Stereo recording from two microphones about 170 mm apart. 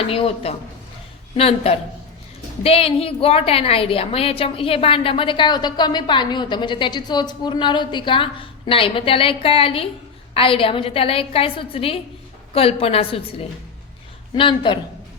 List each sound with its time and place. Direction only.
0.0 s a woman's voice: 35° left (ahead or behind)
14.3 s a man's voice: 30° left (ahead or behind)